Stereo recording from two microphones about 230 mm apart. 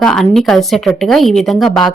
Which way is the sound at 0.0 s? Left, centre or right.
Centre.